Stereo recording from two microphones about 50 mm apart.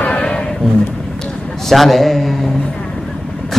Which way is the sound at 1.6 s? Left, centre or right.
Centre.